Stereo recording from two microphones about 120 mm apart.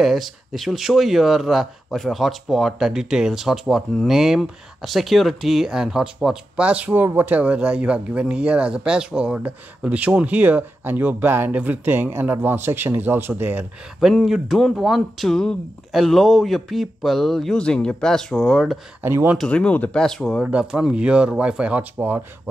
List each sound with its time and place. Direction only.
0.0 s speech: centre (ahead or behind)
13.9 s speech: centre (ahead or behind)
19.0 s speech: 20° right (ahead or behind)
19.3 s speech: 5° left (ahead or behind)
20.4 s speech: 10° right (ahead or behind)